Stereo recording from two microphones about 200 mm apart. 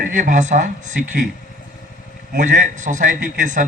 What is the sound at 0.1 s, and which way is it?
A man's voice, 40° right (ahead or behind).